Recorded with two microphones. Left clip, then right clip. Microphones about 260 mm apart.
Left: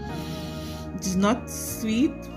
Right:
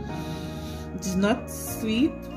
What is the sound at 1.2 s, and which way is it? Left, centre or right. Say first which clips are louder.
Speech: left 1 dB; centre.